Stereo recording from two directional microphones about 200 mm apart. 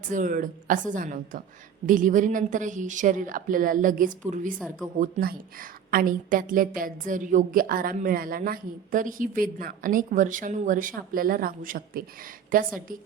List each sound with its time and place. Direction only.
0.1 s a woman's voice: 40° right (ahead or behind)